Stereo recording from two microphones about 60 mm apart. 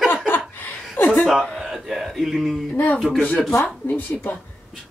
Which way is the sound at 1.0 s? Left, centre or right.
Left.